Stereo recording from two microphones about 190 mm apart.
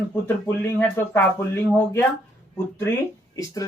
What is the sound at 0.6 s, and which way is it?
Speech, 10° left (ahead or behind).